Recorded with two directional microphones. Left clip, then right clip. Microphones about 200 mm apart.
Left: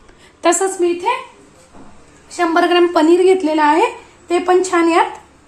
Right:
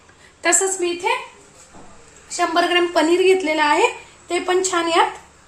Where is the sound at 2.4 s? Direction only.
25° left (ahead or behind).